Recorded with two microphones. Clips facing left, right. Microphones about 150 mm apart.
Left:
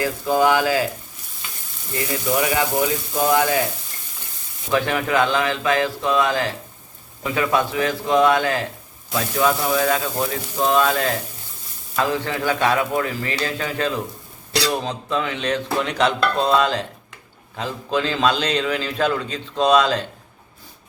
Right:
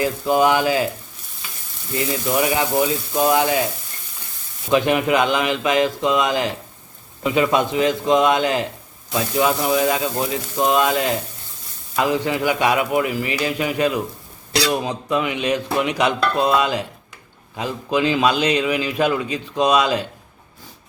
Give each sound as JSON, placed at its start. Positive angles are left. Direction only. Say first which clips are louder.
{"t": 0.0, "sound": "a man's voice", "louder": "right 1 dB", "side_deg": -20}
{"t": 2.4, "sound": "a man's voice", "louder": "right 3 dB", "side_deg": -20}
{"t": 4.7, "sound": "a man's voice", "louder": "right 3 dB", "side_deg": -20}